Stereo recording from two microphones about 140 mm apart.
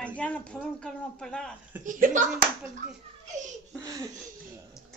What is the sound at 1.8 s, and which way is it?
Speech, 65° right (ahead or behind).